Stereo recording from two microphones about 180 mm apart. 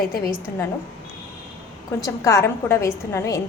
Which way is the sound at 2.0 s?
15° left (ahead or behind).